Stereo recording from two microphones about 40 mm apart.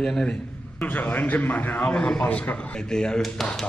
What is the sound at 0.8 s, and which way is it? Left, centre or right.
A man's voice, left.